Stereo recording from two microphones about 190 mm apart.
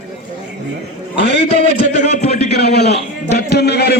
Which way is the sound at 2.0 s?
35° left (ahead or behind).